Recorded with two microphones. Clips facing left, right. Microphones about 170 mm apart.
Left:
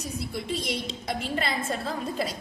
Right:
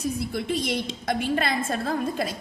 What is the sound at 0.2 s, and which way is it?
A woman's voice, 60° right (ahead or behind).